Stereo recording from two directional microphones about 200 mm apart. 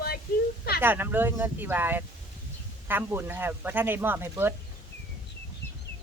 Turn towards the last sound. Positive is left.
turn(degrees=-10)  # may be behind; listen again after turning